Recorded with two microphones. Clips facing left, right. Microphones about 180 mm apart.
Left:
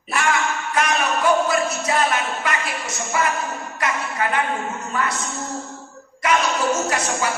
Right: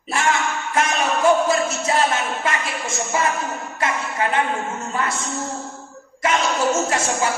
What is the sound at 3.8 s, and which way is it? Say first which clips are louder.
A woman's voice: right 1 dB; 25° right (ahead or behind).